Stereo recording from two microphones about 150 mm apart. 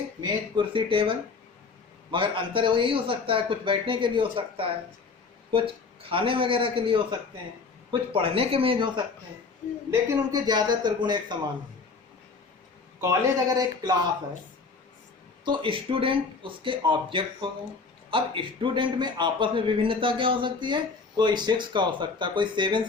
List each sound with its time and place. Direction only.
0.2 s a man's voice: 30° right (ahead or behind)
10.3 s speech: 30° right (ahead or behind)
13.0 s speech: 25° right (ahead or behind)
15.4 s a man's voice: 35° right (ahead or behind)